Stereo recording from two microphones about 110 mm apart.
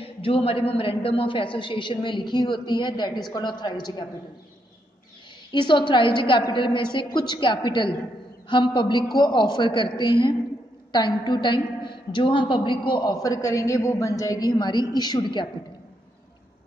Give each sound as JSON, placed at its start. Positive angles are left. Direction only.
{"t": 0.0, "sound": "a woman's voice", "side_deg": 55}
{"t": 5.5, "sound": "a woman's voice", "side_deg": 45}